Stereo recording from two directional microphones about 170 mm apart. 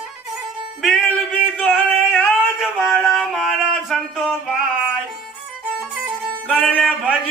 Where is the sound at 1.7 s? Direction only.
10° left (ahead or behind).